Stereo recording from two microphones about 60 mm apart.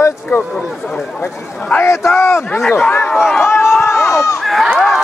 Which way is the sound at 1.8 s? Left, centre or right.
Left.